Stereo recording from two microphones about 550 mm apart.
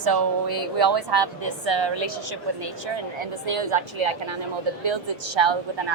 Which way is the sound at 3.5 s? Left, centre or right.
Right.